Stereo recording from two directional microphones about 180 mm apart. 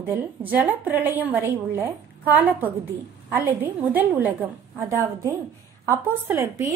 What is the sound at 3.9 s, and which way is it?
Speech, 10° right (ahead or behind).